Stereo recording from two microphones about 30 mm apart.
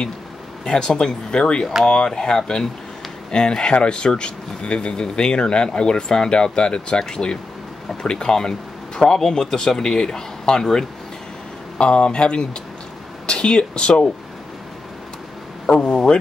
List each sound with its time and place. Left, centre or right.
0.7 s speech: left
11.8 s speech: left
15.6 s a man's voice: left